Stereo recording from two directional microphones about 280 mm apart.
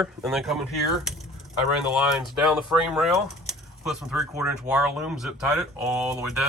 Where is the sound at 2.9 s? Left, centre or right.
Centre.